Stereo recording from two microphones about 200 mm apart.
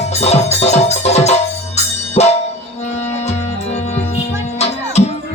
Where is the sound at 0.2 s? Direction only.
30° left (ahead or behind).